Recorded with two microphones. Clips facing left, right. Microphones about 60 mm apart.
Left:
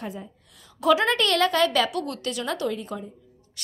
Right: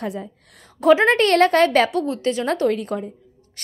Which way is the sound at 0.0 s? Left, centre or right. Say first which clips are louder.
Right 7 dB; right.